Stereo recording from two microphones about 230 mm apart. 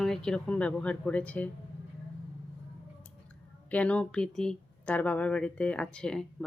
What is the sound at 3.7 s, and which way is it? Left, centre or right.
Speech, centre.